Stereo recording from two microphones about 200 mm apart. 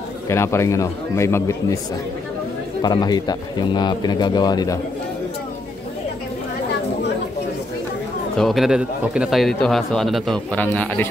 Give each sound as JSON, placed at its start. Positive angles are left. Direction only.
{"t": 0.3, "sound": "a man's voice", "side_deg": 15}
{"t": 2.8, "sound": "speech", "side_deg": 20}
{"t": 8.4, "sound": "a man's voice", "side_deg": 0}